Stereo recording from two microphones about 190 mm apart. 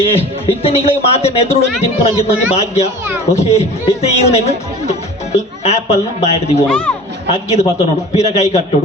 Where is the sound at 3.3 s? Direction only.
35° left (ahead or behind).